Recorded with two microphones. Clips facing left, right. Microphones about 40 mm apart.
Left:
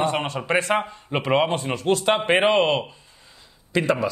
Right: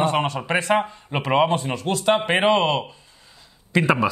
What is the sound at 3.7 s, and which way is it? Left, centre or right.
Speech, centre.